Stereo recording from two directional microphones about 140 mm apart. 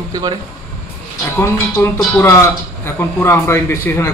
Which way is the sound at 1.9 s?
15° left (ahead or behind).